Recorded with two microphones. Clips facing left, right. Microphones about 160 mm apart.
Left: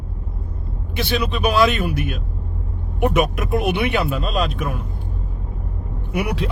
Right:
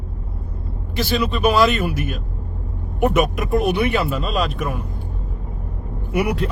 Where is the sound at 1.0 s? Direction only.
Centre (ahead or behind).